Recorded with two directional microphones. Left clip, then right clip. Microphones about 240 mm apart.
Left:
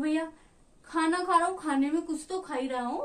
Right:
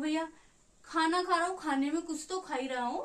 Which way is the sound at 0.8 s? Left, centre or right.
Centre.